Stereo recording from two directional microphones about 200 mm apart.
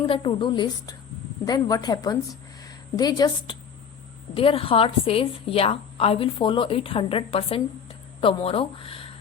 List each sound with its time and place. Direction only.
0.0 s a woman's voice: 25° left (ahead or behind)